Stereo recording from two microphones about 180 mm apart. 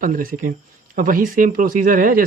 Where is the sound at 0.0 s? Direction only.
50° right (ahead or behind).